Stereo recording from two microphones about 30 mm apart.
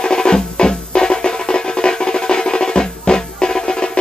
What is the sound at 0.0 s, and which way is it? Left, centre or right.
Music, left.